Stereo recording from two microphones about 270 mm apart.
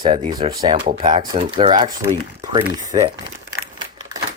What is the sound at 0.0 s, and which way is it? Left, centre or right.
Speech, centre.